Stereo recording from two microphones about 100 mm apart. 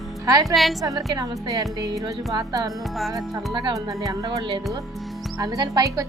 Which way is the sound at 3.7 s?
35° right (ahead or behind).